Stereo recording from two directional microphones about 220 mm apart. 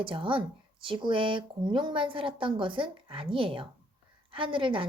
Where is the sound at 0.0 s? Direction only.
25° right (ahead or behind).